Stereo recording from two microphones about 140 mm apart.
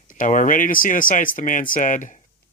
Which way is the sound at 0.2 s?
70° left (ahead or behind).